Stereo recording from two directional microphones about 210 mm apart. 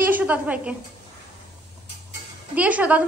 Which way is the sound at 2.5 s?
5° right (ahead or behind).